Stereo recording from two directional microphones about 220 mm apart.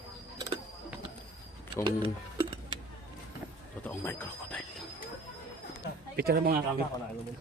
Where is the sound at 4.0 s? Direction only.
10° left (ahead or behind).